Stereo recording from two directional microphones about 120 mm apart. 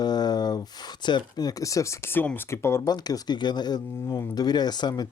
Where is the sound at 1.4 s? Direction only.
30° left (ahead or behind).